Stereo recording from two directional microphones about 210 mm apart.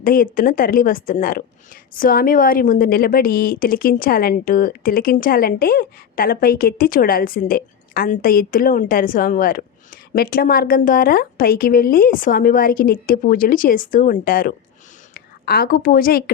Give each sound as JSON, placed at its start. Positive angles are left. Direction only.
{"t": 0.0, "sound": "a woman's voice", "side_deg": 40}